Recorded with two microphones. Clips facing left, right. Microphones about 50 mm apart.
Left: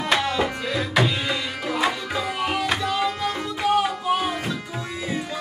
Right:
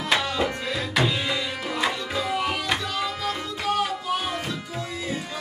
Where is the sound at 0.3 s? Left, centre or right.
Centre.